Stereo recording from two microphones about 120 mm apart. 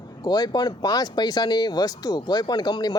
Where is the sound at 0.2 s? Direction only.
35° left (ahead or behind).